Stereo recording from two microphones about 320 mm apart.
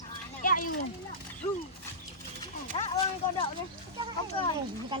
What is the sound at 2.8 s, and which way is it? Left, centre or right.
Speech, centre.